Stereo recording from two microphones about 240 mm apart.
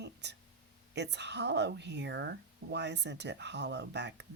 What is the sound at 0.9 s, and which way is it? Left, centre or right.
Speech, right.